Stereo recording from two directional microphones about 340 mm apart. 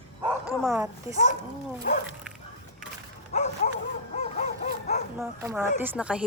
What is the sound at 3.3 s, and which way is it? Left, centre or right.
Dog, centre.